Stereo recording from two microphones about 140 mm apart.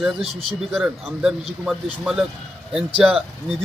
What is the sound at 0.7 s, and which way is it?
A man's voice, centre (ahead or behind).